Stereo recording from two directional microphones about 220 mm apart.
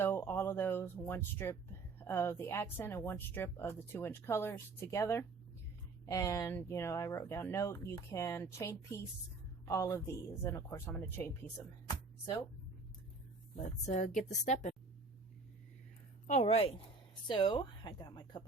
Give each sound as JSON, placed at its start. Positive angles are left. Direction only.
{"t": 0.0, "sound": "speech", "side_deg": 10}
{"t": 13.6, "sound": "speech", "side_deg": 35}
{"t": 16.2, "sound": "speech", "side_deg": 30}